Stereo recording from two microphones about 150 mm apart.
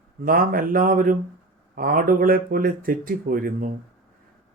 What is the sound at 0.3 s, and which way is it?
Speech, 70° right (ahead or behind).